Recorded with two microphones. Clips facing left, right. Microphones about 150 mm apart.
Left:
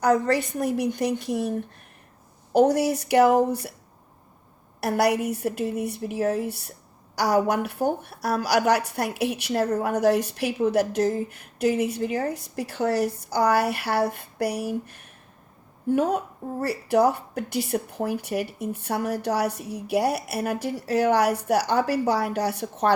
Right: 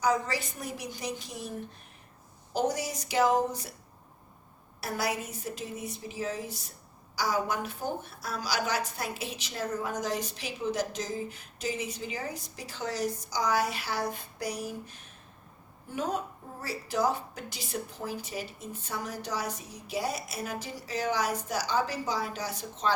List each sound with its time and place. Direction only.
0.0 s speech: 60° left (ahead or behind)
4.8 s speech: 65° left (ahead or behind)